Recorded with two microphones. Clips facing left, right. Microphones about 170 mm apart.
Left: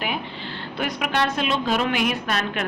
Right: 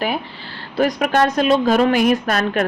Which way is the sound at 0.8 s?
40° right (ahead or behind).